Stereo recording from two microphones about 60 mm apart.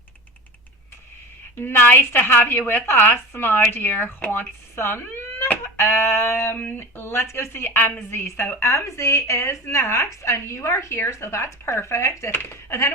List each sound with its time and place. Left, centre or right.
1.5 s a woman's voice: left
4.7 s a sound: left
5.7 s a woman's voice: left
6.6 s a woman's voice: left
12.4 s speech: left